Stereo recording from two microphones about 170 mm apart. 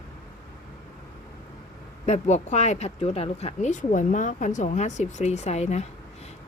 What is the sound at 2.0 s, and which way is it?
Speech, 40° left (ahead or behind).